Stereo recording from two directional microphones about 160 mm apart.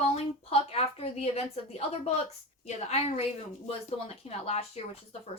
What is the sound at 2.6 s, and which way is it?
A woman's voice, 40° left (ahead or behind).